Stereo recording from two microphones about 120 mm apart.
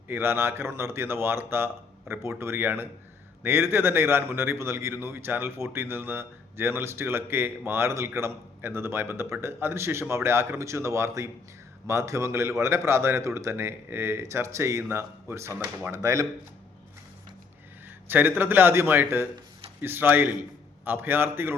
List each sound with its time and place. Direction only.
0.1 s a man's voice: 20° right (ahead or behind)
15.5 s speech: 10° right (ahead or behind)
15.9 s a man's voice: 25° right (ahead or behind)
17.8 s speech: 15° right (ahead or behind)